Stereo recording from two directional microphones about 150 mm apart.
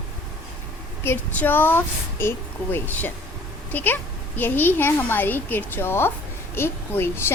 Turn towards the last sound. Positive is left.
turn(degrees=15)  # may be behind; listen again after turning